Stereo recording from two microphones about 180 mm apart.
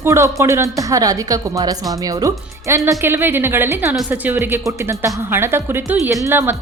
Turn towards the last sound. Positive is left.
turn(degrees=-10)  # may be behind; listen again after turning